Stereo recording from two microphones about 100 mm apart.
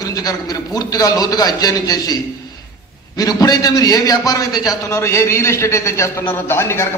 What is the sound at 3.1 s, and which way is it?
A man's voice, 40° left (ahead or behind).